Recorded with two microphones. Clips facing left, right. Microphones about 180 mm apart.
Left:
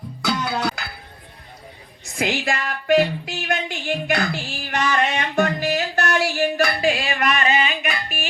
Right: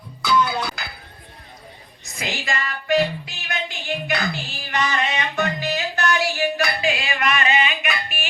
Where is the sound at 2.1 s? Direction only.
60° left (ahead or behind).